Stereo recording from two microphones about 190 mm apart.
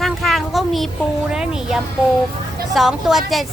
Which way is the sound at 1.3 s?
5° right (ahead or behind).